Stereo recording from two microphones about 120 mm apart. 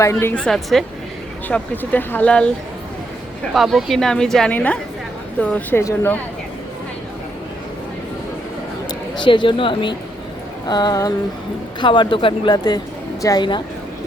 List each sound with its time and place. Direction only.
0.0 s speech: 20° left (ahead or behind)
0.3 s a woman's voice: 5° left (ahead or behind)
1.5 s speech: 15° left (ahead or behind)
3.5 s a woman's voice: centre (ahead or behind); by 6.1 s 20° left (ahead or behind)
8.9 s speech: 40° left (ahead or behind)
11.8 s speech: 40° left (ahead or behind)